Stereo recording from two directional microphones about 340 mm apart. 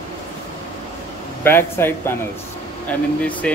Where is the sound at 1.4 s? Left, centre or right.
Centre.